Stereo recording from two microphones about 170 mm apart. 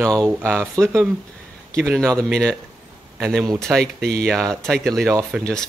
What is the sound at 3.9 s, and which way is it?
Speech, 70° right (ahead or behind).